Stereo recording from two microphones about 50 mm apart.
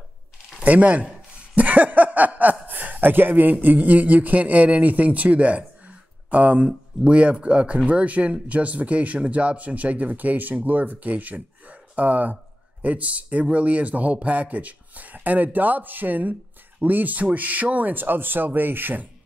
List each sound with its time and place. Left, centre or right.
0.7 s speech: right
5.9 s a sound: right
7.1 s speech: right